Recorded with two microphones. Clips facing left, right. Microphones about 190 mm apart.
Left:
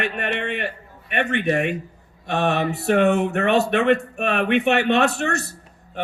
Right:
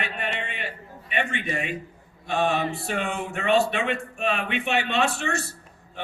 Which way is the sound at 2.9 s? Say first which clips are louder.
Left 11 dB; 65° left (ahead or behind).